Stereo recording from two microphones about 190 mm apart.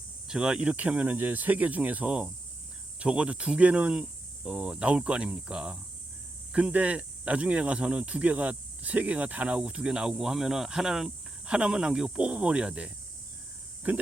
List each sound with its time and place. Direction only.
0.3 s speech: 5° right (ahead or behind)